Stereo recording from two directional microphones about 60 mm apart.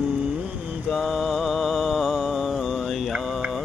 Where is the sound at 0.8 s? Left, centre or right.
Centre.